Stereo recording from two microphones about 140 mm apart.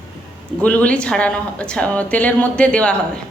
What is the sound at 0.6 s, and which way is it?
A woman's voice, 10° left (ahead or behind).